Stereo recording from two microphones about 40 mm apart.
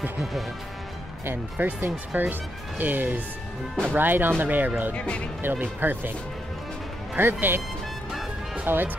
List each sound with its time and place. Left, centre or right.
1.6 s speech: right
4.9 s speech: left
5.4 s speech: right
7.2 s speech: right
8.6 s speech: right